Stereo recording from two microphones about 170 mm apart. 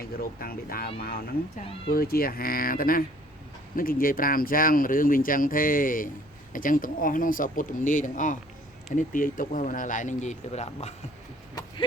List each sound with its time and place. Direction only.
0.0 s speech: 60° left (ahead or behind); by 10.9 s 40° left (ahead or behind)